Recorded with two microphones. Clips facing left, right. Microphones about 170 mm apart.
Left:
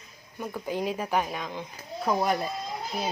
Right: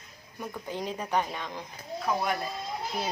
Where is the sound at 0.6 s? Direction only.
10° left (ahead or behind).